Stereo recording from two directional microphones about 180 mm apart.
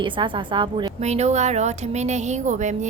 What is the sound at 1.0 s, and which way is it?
Speech, 40° right (ahead or behind).